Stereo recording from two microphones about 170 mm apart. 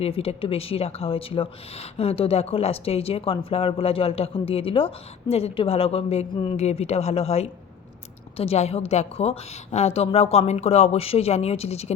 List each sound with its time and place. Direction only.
0.0 s speech: 35° left (ahead or behind)